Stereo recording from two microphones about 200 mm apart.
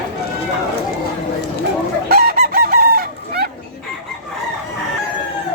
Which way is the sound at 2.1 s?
50° right (ahead or behind).